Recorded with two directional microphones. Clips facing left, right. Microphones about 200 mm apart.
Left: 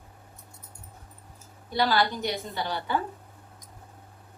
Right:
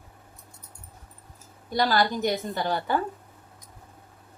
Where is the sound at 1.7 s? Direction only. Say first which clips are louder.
Right 1 dB; 45° right (ahead or behind).